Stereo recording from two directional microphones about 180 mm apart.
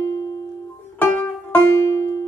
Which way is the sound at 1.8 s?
15° left (ahead or behind).